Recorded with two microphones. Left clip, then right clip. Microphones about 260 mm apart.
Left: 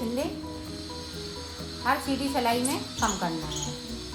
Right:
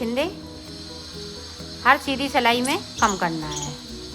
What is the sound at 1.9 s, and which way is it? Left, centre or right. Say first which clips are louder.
Speech: right 8 dB; right.